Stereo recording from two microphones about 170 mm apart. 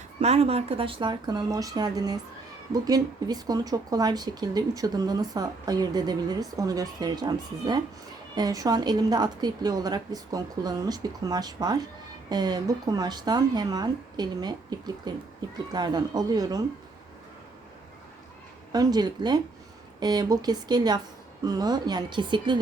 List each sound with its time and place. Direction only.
0.2 s speech: 40° right (ahead or behind); by 16.6 s 20° right (ahead or behind)
18.7 s speech: 25° right (ahead or behind)